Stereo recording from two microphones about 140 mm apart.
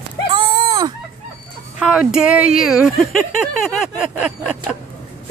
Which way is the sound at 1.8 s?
5° right (ahead or behind).